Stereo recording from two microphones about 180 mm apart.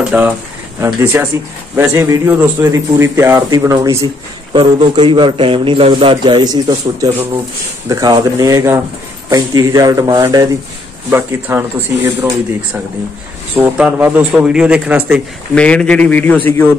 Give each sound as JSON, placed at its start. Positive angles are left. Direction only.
{"t": 0.1, "sound": "a man's voice", "side_deg": -10}
{"t": 13.6, "sound": "speech", "side_deg": -10}
{"t": 15.5, "sound": "a man's voice", "side_deg": 5}